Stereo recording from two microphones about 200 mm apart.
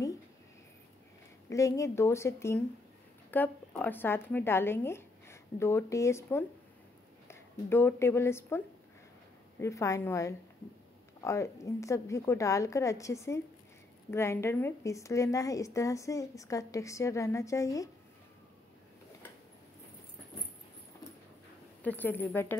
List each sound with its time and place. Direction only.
1.5 s a woman's voice: 15° left (ahead or behind)
21.8 s a woman's voice: 10° left (ahead or behind)